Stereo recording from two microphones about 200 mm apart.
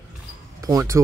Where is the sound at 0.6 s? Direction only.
15° right (ahead or behind).